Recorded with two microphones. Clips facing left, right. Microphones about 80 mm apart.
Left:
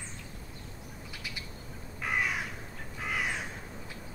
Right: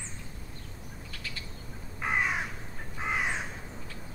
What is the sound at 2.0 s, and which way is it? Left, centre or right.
Crow, right.